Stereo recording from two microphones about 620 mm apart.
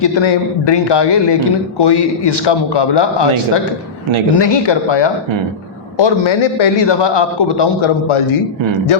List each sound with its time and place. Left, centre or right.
0.0 s a man's voice: left